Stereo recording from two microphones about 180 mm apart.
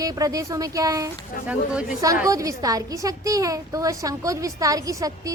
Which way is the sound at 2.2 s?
20° right (ahead or behind).